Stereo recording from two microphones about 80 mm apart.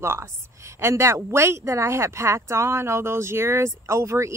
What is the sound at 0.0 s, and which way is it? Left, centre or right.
Speech, right.